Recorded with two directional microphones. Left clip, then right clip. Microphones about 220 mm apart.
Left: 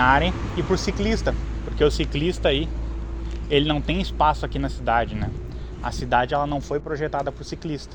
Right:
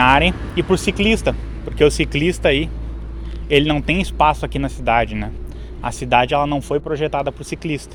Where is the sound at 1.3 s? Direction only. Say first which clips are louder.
Right 5 dB; 30° right (ahead or behind).